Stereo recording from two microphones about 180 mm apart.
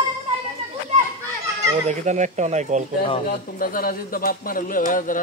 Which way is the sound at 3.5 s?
55° left (ahead or behind).